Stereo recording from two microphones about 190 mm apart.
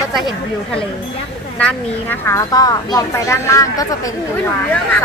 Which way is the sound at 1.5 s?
10° left (ahead or behind).